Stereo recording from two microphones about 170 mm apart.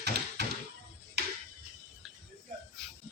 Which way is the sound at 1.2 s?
75° right (ahead or behind).